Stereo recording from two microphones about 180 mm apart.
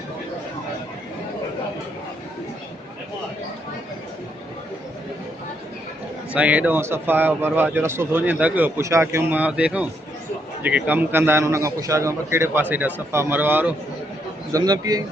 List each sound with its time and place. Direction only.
6.3 s speech: 10° right (ahead or behind)
14.5 s a man's voice: 20° right (ahead or behind)